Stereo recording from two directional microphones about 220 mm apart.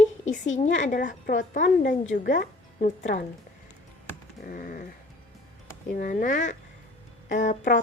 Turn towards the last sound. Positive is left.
turn(degrees=35)  # may be behind; listen again after turning